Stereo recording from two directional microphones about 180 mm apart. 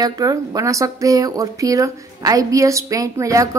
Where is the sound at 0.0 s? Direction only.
20° right (ahead or behind).